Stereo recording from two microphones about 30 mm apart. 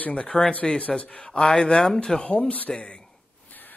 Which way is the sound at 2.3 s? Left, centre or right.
Left.